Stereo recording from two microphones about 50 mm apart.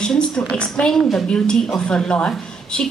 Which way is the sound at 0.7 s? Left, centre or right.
Centre.